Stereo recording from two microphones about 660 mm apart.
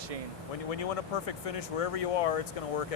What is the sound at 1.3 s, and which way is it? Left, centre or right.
Speech, left.